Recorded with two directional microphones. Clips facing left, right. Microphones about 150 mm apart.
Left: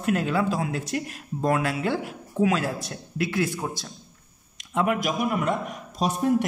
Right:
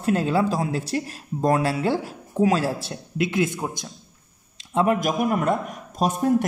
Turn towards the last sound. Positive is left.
turn(degrees=-45)  # may be behind; listen again after turning